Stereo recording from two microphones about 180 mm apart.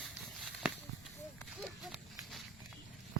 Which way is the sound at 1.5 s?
Centre (ahead or behind).